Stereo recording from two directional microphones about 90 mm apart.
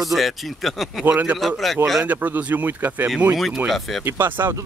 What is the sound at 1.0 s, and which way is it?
A man's voice, 20° right (ahead or behind).